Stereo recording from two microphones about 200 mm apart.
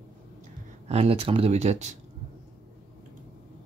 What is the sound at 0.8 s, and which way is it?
Speech, 30° right (ahead or behind).